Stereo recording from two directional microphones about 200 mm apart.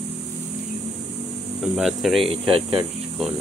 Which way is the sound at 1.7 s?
Centre (ahead or behind).